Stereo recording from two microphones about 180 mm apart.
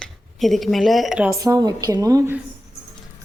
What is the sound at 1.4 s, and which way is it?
Speech, 20° right (ahead or behind).